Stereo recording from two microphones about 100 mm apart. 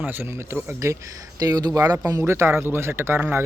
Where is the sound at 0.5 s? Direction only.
30° right (ahead or behind).